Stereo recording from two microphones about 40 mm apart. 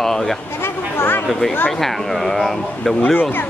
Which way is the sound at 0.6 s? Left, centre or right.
Left.